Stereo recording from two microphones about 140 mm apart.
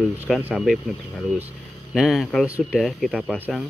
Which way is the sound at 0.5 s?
Centre (ahead or behind).